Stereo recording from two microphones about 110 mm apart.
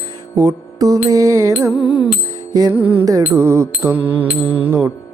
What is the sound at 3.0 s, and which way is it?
Music, 25° right (ahead or behind).